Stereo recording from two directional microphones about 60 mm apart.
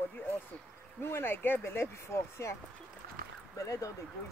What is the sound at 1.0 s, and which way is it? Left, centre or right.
Speech, left.